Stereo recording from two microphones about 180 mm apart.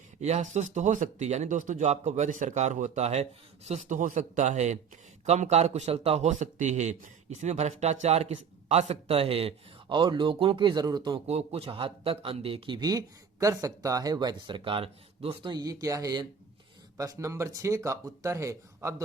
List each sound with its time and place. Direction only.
0.2 s a man's voice: 40° right (ahead or behind); by 11.2 s 25° right (ahead or behind)
11.3 s speech: 35° right (ahead or behind); by 19.0 s 15° right (ahead or behind)